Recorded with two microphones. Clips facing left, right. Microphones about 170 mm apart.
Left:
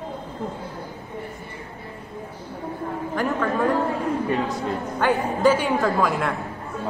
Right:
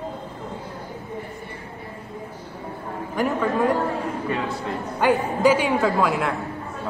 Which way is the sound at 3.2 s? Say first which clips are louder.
Right 2 dB; 15° right (ahead or behind).